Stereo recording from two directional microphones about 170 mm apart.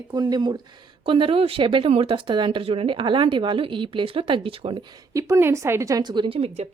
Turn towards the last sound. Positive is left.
turn(degrees=-35)  # may be behind; listen again after turning